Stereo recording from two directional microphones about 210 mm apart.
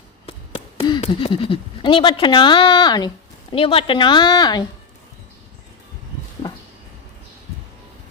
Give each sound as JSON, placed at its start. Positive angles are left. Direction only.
{"t": 0.3, "sound": "a woman's voice", "side_deg": 25}